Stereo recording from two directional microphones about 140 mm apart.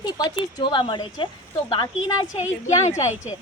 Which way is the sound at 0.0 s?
30° left (ahead or behind).